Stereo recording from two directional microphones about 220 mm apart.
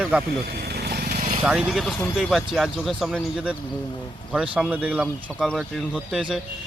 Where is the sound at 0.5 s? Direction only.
45° right (ahead or behind).